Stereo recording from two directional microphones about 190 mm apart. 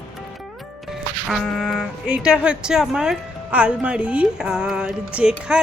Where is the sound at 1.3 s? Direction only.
Centre (ahead or behind).